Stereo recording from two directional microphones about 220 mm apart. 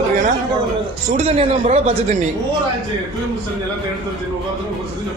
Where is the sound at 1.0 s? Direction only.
30° right (ahead or behind).